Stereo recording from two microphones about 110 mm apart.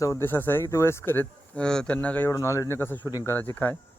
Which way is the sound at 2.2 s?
25° left (ahead or behind).